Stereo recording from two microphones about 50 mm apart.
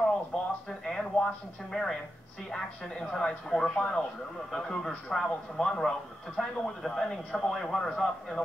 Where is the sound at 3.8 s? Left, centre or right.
Centre.